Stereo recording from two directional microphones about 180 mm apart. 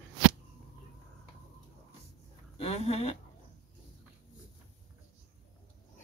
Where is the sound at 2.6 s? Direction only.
35° left (ahead or behind).